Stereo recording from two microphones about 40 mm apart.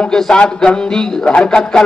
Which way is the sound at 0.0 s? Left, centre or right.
Centre.